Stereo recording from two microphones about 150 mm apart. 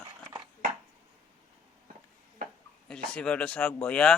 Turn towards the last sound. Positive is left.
turn(degrees=5)  # may be behind; listen again after turning